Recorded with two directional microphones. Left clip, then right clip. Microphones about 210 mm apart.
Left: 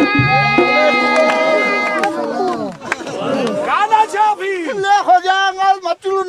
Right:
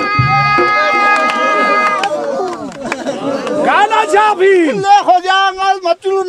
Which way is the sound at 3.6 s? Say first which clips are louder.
Right 3 dB; 40° right (ahead or behind).